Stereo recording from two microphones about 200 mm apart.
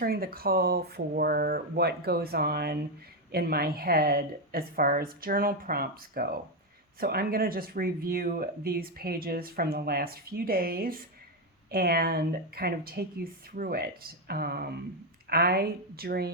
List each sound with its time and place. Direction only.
0.0 s speech: 50° right (ahead or behind)